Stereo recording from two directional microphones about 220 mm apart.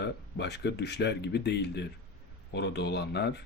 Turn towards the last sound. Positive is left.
turn(degrees=50)  # may be behind; listen again after turning